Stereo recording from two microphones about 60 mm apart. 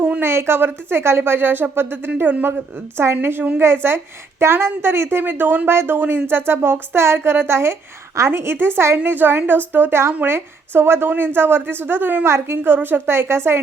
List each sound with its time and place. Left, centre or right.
0.2 s a woman's voice: right
2.0 s a woman's voice: right
3.6 s a woman's voice: right
12.2 s a woman's voice: right